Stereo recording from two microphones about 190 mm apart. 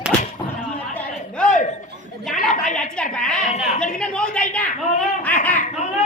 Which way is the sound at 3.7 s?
40° left (ahead or behind).